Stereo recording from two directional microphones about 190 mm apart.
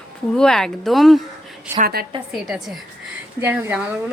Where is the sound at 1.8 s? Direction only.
55° right (ahead or behind).